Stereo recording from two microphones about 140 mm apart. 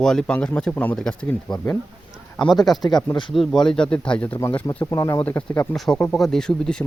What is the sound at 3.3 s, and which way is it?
Speech, centre (ahead or behind).